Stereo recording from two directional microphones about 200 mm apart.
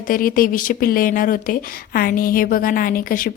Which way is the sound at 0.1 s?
45° left (ahead or behind).